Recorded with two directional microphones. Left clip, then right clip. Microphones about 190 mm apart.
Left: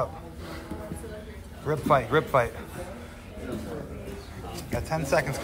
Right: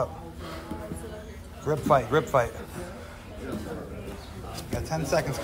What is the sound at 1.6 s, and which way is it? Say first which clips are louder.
Speech: right 1 dB; 10° right (ahead or behind).